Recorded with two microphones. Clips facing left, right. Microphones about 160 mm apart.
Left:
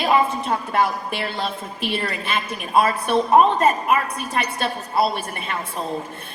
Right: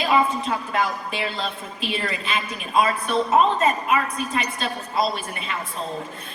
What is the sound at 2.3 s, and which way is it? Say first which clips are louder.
A woman's voice: left 2 dB; 65° left (ahead or behind).